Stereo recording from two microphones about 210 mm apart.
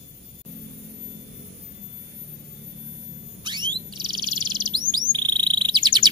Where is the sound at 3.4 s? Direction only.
20° right (ahead or behind).